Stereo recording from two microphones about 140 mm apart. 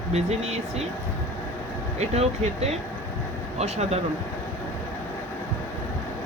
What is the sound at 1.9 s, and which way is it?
Speech, 50° right (ahead or behind).